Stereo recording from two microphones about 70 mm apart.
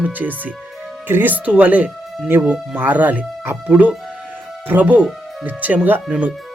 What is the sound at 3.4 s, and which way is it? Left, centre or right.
Speech, right.